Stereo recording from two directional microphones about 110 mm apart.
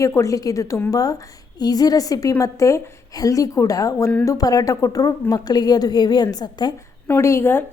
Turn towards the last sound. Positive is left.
turn(degrees=20)  # may be behind; listen again after turning